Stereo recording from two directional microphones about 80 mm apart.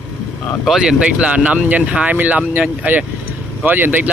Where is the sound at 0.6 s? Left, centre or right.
Centre.